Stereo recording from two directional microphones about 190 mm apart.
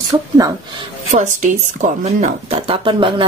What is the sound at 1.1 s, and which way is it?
Speech, 40° right (ahead or behind).